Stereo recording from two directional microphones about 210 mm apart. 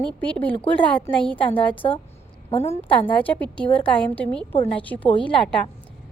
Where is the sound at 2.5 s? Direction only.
30° left (ahead or behind).